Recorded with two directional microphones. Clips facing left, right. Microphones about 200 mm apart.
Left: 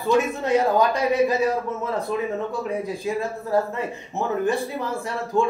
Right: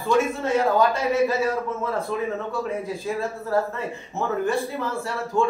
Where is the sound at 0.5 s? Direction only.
15° left (ahead or behind).